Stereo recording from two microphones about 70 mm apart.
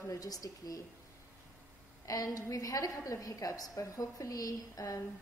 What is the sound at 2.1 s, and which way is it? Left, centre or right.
A woman's voice, left.